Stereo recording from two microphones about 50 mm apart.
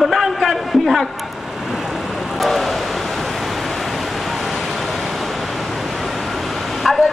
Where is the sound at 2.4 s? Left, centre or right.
Centre.